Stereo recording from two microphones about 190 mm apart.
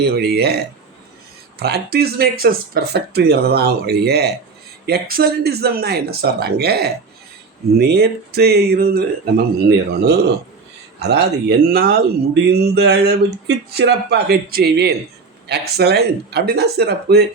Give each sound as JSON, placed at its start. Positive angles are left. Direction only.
{"t": 0.0, "sound": "speech", "side_deg": -55}